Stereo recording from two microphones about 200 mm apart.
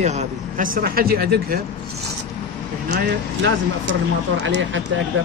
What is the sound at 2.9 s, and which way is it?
Speech, 65° right (ahead or behind).